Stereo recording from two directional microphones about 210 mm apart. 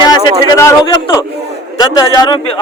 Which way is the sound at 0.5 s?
15° left (ahead or behind).